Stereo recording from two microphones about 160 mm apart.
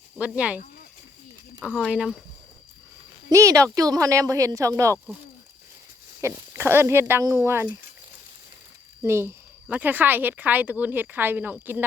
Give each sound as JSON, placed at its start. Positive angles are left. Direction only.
{"t": 0.2, "sound": "a woman's voice", "side_deg": -10}
{"t": 1.9, "sound": "speech", "side_deg": -5}
{"t": 3.2, "sound": "speech", "side_deg": -20}
{"t": 6.2, "sound": "a woman's voice", "side_deg": -15}
{"t": 9.0, "sound": "a woman's voice", "side_deg": -15}